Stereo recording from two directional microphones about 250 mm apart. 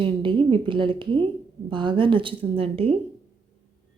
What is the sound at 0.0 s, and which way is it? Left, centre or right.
A woman's voice, centre.